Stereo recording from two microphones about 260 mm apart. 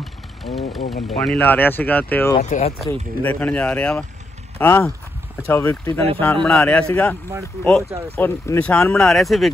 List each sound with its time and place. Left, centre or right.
0.0 s vehicle: centre
0.8 s speech: left
1.1 s speech: centre
2.3 s speech: left
2.9 s speech: centre
8.2 s speech: centre